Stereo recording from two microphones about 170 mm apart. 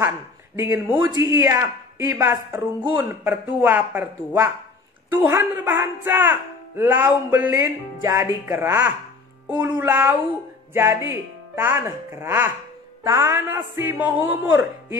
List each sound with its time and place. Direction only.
0.6 s speech: 15° right (ahead or behind)
5.1 s speech: 10° right (ahead or behind)